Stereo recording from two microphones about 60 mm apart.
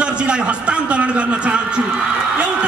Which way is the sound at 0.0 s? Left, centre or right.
Centre.